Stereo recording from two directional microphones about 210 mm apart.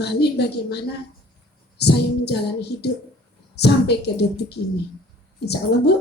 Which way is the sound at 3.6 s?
50° left (ahead or behind).